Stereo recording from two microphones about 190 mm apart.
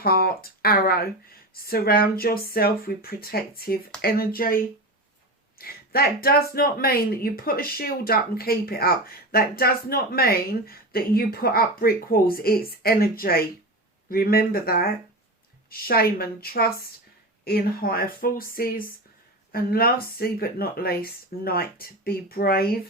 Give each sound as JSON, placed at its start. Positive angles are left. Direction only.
{"t": 0.0, "sound": "speech", "side_deg": 55}
{"t": 5.5, "sound": "a sound", "side_deg": 50}
{"t": 6.2, "sound": "speech", "side_deg": 55}